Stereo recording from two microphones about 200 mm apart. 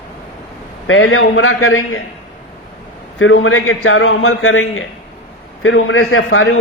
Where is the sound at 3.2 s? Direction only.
80° left.